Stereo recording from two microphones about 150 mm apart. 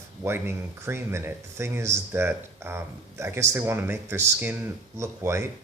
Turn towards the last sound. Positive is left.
turn(degrees=-15)  # may be behind; listen again after turning